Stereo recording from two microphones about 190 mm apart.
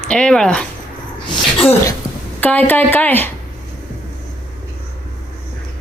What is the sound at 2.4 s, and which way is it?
Speech, 10° left (ahead or behind).